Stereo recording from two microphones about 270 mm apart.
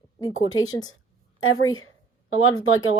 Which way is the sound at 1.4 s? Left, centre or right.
Left.